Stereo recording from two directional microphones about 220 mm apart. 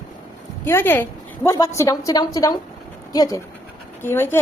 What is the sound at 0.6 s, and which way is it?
A woman's voice, 10° left (ahead or behind).